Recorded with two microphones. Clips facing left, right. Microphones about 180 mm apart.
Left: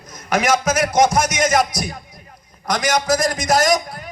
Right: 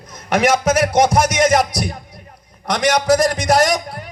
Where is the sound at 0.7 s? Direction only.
30° right (ahead or behind).